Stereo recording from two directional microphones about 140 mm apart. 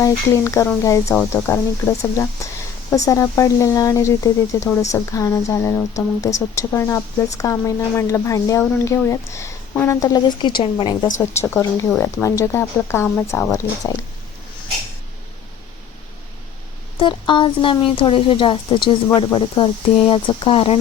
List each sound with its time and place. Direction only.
0.0 s speech: 20° left (ahead or behind)
11.4 s speech: 20° left (ahead or behind)
17.0 s speech: 35° left (ahead or behind)